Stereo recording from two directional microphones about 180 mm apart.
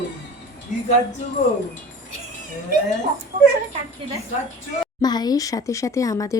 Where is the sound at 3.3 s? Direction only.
45° right (ahead or behind).